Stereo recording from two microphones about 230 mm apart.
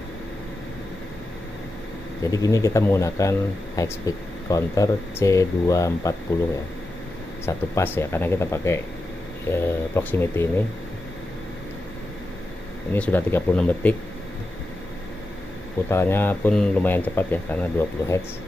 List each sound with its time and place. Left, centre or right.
2.4 s speech: centre
7.4 s speech: centre
12.9 s speech: centre
15.9 s speech: centre